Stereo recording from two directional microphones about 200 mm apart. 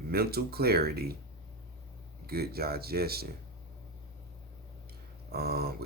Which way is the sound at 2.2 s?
50° right (ahead or behind).